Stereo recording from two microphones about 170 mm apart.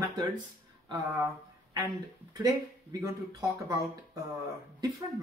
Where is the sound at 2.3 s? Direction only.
20° right (ahead or behind).